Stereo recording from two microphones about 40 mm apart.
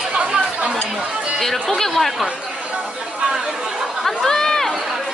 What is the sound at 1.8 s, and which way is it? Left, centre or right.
Speech, centre.